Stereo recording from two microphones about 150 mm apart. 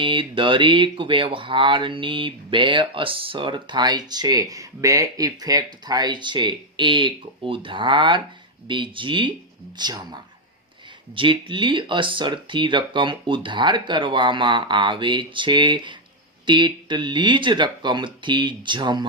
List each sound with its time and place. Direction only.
0.0 s speech: 35° right (ahead or behind)